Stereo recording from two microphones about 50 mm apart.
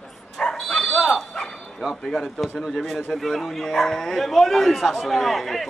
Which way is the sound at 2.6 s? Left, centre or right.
Centre.